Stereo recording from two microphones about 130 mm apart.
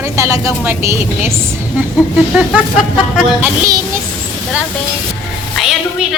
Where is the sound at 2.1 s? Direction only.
5° right (ahead or behind).